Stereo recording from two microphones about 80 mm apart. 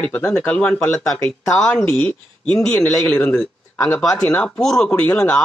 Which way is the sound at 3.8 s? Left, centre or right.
Left.